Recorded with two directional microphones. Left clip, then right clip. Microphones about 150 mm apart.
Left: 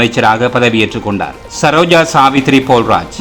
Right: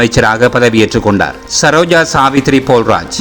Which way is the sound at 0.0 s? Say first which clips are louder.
Right 1 dB; 25° right (ahead or behind).